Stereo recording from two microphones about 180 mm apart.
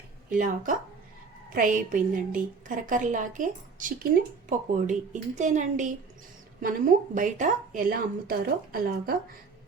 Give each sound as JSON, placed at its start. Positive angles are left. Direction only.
{"t": 0.3, "sound": "a woman's voice", "side_deg": -50}